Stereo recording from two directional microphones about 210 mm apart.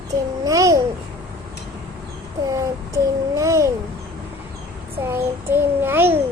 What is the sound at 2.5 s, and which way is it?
A child's voice, 15° right (ahead or behind).